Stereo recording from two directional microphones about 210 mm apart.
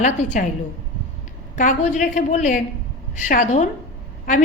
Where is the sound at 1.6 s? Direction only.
40° left (ahead or behind).